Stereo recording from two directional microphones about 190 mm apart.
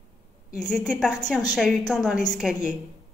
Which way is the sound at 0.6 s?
5° left (ahead or behind).